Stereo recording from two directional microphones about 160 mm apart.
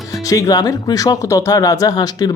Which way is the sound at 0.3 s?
20° left (ahead or behind).